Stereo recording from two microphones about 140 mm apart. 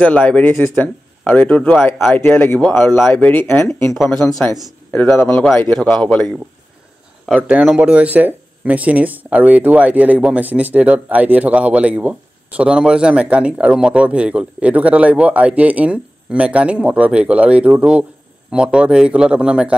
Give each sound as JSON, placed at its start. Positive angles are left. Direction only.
{"t": 0.0, "sound": "speech", "side_deg": 10}
{"t": 3.9, "sound": "speech", "side_deg": 5}
{"t": 4.5, "sound": "speech", "side_deg": 15}
{"t": 5.7, "sound": "speech", "side_deg": 5}
{"t": 7.3, "sound": "speech", "side_deg": -10}